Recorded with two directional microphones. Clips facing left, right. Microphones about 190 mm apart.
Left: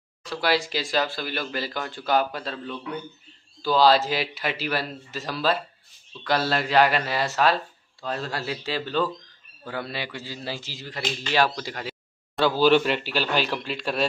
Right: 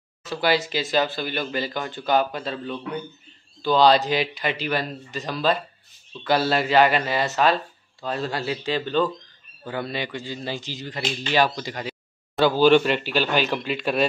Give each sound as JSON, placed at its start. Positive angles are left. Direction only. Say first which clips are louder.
{"t": 0.2, "sound": "speech", "louder": "right 2 dB", "side_deg": 0}